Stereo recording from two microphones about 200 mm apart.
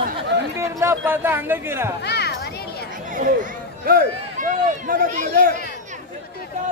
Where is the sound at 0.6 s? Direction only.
15° right (ahead or behind).